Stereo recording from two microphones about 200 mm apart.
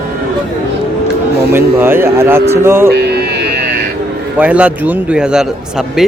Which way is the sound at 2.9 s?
55° right (ahead or behind).